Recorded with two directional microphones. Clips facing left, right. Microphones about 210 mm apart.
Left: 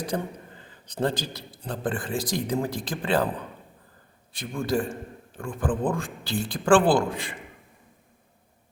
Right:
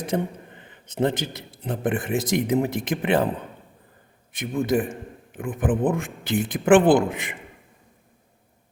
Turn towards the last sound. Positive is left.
turn(degrees=-20)  # may be behind; listen again after turning